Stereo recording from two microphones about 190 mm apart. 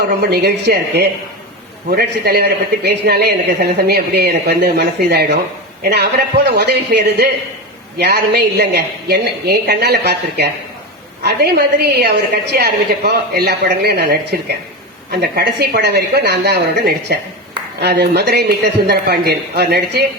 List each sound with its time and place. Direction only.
0.2 s a man's voice: 60° right (ahead or behind)